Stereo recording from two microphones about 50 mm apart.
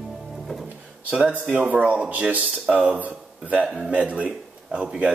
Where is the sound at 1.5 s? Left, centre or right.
Right.